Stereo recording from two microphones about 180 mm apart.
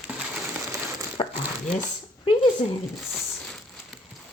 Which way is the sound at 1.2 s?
30° left (ahead or behind).